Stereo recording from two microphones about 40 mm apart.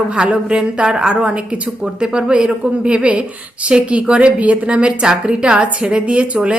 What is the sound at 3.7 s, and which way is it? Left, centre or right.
A woman's voice, right.